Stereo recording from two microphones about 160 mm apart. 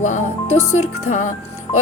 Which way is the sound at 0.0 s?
45° left (ahead or behind).